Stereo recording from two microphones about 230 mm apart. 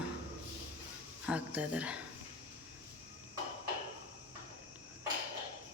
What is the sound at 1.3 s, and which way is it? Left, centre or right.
Speech, centre.